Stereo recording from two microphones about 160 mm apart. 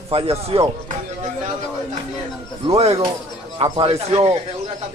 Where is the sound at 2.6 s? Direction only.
40° right (ahead or behind).